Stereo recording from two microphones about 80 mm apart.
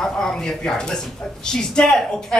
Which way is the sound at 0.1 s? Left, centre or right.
Centre.